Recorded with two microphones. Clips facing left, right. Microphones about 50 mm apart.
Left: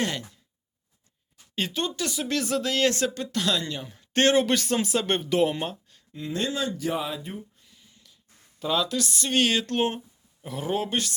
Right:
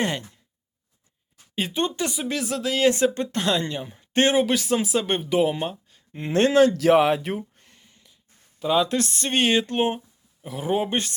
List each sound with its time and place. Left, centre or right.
0.0 s speech: right
1.7 s speech: right
3.2 s speech: right; by 6.0 s centre
6.1 s speech: right
7.5 s a sound: right
8.1 s a sound: centre
8.8 s speech: right; by 10.8 s centre
10.8 s speech: right